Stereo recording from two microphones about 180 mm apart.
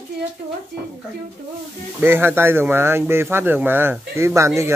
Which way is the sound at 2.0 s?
10° right (ahead or behind).